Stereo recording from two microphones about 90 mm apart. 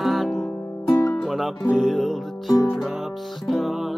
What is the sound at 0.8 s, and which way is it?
Music, 35° left (ahead or behind).